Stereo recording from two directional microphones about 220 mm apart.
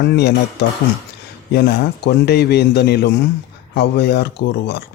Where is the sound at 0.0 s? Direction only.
50° left (ahead or behind).